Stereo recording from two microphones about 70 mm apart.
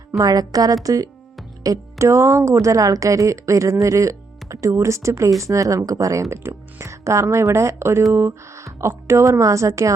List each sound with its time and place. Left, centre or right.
0.2 s speech: right
6.3 s speech: right